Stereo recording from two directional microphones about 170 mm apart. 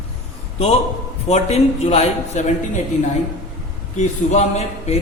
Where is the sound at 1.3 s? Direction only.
40° left (ahead or behind).